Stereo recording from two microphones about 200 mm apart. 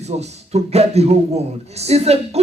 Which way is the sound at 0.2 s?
30° right (ahead or behind).